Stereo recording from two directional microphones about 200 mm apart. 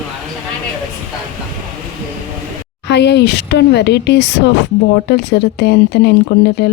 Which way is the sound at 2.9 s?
60° left (ahead or behind).